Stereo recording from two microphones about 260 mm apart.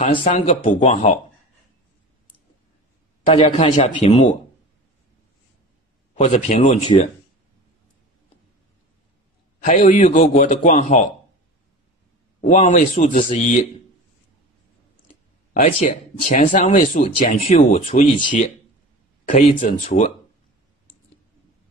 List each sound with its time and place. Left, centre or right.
0.0 s speech: left
3.3 s speech: left
6.1 s speech: left
9.6 s speech: left
12.4 s speech: left
15.5 s speech: left